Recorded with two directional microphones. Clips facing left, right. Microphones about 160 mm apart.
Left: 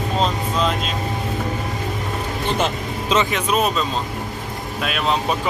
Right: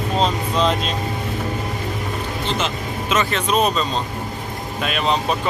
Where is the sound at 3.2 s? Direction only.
10° left (ahead or behind).